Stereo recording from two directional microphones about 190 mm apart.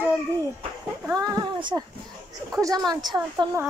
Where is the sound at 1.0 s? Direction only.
20° right (ahead or behind).